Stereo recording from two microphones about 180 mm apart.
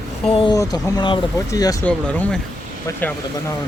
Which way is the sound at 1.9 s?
10° left (ahead or behind).